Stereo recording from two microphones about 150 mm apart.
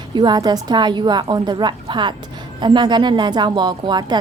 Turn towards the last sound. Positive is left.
turn(degrees=-30)  # may be behind; listen again after turning